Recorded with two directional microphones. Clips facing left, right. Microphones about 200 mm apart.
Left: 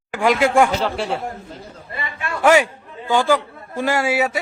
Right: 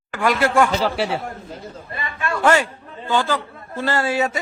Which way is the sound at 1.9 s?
20° left (ahead or behind).